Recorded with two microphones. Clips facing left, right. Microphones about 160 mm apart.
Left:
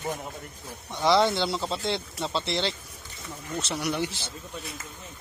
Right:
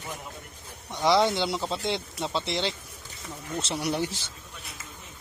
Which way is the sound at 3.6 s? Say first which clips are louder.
Right 1 dB; 30° right (ahead or behind).